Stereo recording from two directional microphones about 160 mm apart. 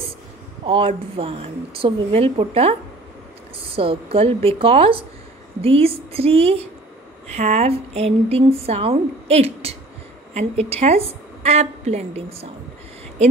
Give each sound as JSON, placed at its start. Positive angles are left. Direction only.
{"t": 0.7, "sound": "speech", "side_deg": -35}
{"t": 3.7, "sound": "speech", "side_deg": -35}